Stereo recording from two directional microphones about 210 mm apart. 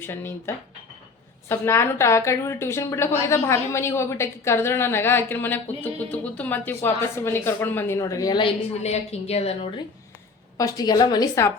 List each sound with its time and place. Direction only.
0.0 s a woman's voice: 10° left (ahead or behind)
8.8 s a woman's voice: 30° left (ahead or behind)
10.6 s a woman's voice: 20° left (ahead or behind)